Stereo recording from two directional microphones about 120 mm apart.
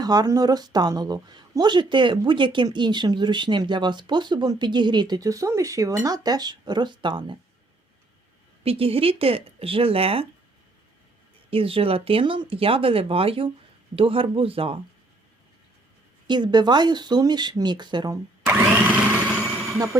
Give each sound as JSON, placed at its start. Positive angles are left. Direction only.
{"t": 0.0, "sound": "speech", "side_deg": -35}
{"t": 8.6, "sound": "speech", "side_deg": -55}
{"t": 11.5, "sound": "speech", "side_deg": -50}
{"t": 16.2, "sound": "speech", "side_deg": -35}
{"t": 18.4, "sound": "a sound", "side_deg": -10}